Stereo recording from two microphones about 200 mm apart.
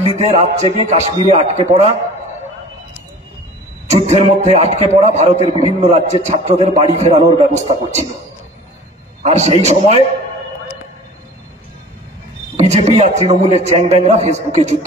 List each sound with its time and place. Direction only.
0.2 s a man's voice: 35° right (ahead or behind)
3.8 s a man's voice: 35° right (ahead or behind)
9.2 s a man's voice: 35° right (ahead or behind)
12.5 s a man's voice: 35° right (ahead or behind)